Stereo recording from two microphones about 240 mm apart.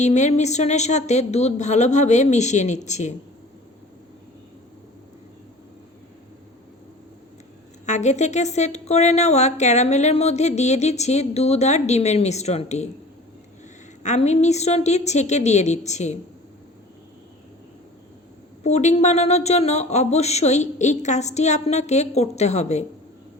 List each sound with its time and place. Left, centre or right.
0.0 s speech: left
7.9 s speech: left
14.0 s speech: left
18.6 s speech: left